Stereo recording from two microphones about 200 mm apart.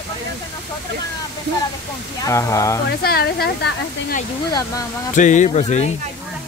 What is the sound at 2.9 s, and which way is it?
Speech, 50° left (ahead or behind).